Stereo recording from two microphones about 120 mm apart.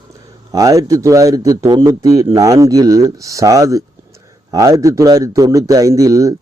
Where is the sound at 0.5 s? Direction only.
30° right (ahead or behind).